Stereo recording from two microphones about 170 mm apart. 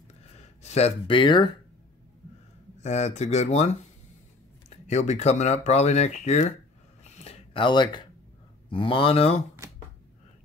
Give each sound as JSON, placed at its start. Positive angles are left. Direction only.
{"t": 0.4, "sound": "speech", "side_deg": 40}
{"t": 2.8, "sound": "speech", "side_deg": 40}
{"t": 7.2, "sound": "a sound", "side_deg": 30}
{"t": 8.6, "sound": "speech", "side_deg": 30}